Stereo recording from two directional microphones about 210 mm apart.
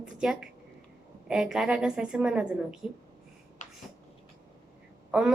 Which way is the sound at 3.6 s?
35° left (ahead or behind).